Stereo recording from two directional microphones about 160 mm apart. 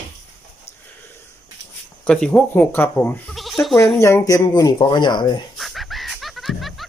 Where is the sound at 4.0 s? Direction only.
20° left (ahead or behind).